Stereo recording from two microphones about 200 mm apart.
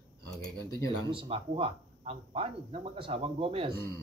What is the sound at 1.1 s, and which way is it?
Speech, 25° right (ahead or behind).